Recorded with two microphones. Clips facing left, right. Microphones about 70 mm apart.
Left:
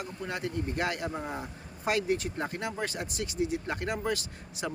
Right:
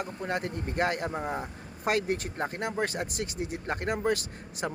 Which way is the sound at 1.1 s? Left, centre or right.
Right.